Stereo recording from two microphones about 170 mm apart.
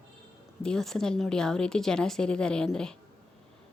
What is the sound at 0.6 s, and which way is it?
Speech, 5° left (ahead or behind).